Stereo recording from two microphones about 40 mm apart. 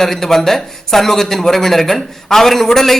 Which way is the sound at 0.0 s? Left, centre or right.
Centre.